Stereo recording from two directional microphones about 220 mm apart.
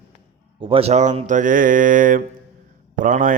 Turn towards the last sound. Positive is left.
turn(degrees=-35)  # may be behind; listen again after turning